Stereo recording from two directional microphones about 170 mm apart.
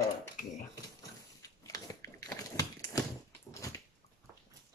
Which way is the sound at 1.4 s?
20° left (ahead or behind).